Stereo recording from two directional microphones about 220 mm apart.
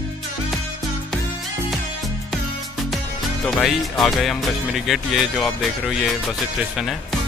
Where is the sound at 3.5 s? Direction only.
Centre (ahead or behind).